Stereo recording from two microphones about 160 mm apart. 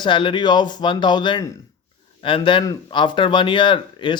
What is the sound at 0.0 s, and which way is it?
A man's voice, 30° left (ahead or behind).